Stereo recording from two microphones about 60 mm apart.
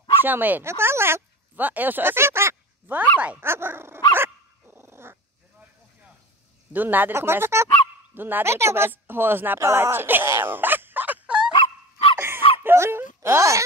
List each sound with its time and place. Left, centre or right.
0.2 s speech: right
0.7 s speech: right
1.6 s speech: right
3.0 s speech: right
3.4 s dog: right
6.7 s speech: right
7.2 s speech: right
8.5 s speech: right
9.6 s speech: right
10.2 s a sound: right
11.2 s fowl: centre
12.2 s a sound: right